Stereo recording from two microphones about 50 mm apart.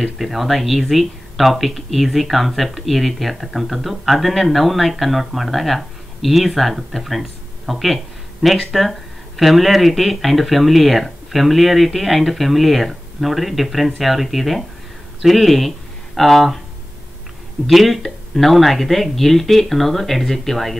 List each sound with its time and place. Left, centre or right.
0.0 s speech: centre
17.6 s speech: centre